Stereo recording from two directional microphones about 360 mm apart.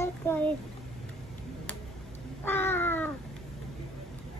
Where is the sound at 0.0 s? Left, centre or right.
Centre.